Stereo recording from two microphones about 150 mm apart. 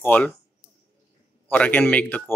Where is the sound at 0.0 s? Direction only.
10° left (ahead or behind).